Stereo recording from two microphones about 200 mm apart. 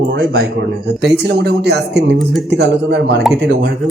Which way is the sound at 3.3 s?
Centre (ahead or behind).